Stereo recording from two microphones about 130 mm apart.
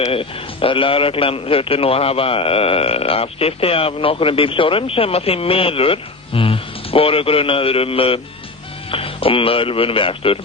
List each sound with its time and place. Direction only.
0.0 s a man's voice: 45° left (ahead or behind)